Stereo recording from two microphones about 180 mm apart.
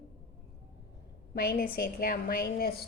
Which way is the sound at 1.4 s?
55° left (ahead or behind).